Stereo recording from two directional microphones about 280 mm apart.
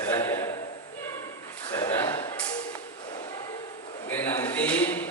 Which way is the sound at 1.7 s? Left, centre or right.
Centre.